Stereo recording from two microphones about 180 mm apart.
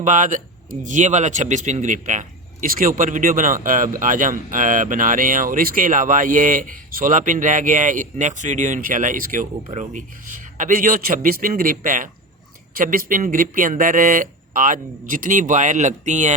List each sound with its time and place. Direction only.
0.0 s speech: 45° right (ahead or behind)